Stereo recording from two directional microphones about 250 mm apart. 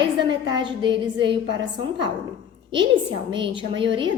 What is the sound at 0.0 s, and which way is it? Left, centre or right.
A woman's voice, centre.